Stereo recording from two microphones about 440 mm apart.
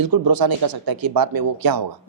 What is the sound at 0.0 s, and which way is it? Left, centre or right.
A man's voice, right.